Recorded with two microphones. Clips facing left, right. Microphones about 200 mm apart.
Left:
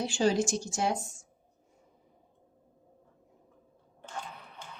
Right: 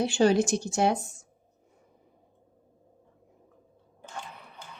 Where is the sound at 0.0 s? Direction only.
60° right (ahead or behind).